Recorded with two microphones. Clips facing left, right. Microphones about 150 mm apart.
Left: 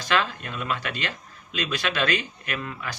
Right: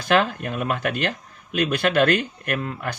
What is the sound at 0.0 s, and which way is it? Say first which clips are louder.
Speech: right 5 dB; 55° right (ahead or behind).